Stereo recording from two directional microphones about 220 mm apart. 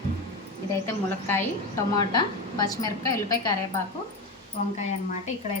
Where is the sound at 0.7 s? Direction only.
10° left (ahead or behind).